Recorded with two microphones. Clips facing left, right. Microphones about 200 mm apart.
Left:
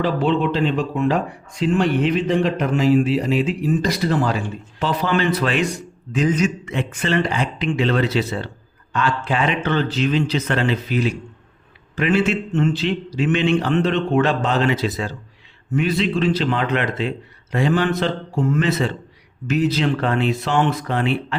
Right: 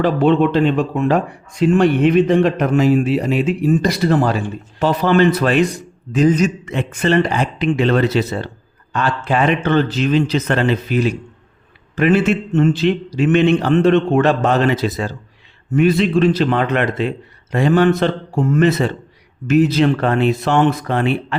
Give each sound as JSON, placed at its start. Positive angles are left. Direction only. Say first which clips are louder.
{"t": 0.0, "sound": "speech", "louder": "right 5 dB", "side_deg": -50}